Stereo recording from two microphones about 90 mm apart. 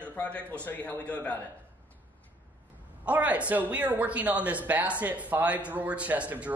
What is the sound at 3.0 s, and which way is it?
Speech, 15° right (ahead or behind).